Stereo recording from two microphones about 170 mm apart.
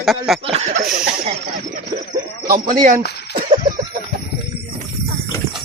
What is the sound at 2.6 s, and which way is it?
Speech, 50° right (ahead or behind).